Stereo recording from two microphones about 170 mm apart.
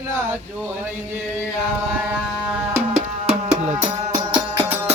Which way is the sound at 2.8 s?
40° right (ahead or behind).